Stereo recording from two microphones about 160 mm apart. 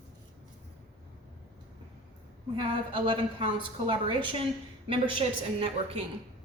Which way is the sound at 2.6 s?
30° right (ahead or behind).